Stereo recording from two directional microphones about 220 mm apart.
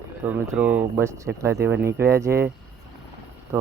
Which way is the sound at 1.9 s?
15° right (ahead or behind).